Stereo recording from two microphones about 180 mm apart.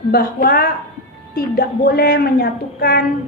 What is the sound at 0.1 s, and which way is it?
A woman's voice, 55° left (ahead or behind).